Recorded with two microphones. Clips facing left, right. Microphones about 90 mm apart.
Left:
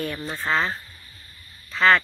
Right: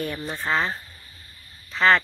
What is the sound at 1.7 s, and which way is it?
Speech, 20° right (ahead or behind).